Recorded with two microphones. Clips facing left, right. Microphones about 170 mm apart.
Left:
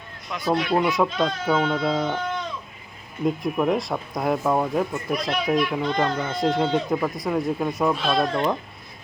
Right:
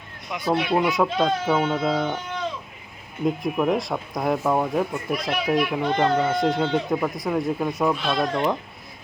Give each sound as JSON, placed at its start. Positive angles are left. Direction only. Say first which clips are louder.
{"t": 0.3, "sound": "speech", "louder": "even", "side_deg": -20}
{"t": 0.9, "sound": "speech", "louder": "right 1 dB", "side_deg": 0}
{"t": 3.2, "sound": "speech", "louder": "even", "side_deg": 0}
{"t": 8.1, "sound": "speech", "louder": "left 1 dB", "side_deg": -15}